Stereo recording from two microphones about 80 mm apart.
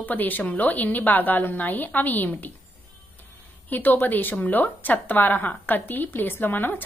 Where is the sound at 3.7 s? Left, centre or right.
Left.